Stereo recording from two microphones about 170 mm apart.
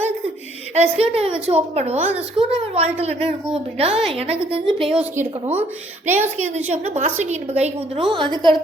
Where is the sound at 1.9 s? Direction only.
10° right (ahead or behind).